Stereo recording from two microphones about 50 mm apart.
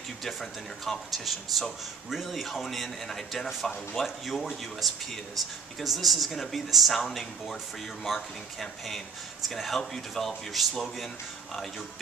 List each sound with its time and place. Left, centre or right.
0.2 s speech: centre